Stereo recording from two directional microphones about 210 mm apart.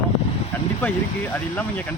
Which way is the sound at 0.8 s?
10° left (ahead or behind).